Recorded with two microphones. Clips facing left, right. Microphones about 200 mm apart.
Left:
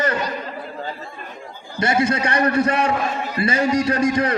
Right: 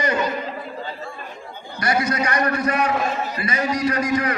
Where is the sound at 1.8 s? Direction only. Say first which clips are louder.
Left 3 dB; 25° left (ahead or behind).